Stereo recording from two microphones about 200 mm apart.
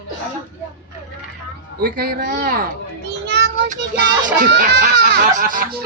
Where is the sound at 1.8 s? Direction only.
50° right (ahead or behind).